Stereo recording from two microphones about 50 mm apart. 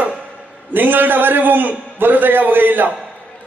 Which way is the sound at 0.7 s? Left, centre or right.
Right.